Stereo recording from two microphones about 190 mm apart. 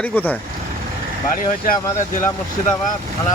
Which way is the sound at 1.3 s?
45° left (ahead or behind).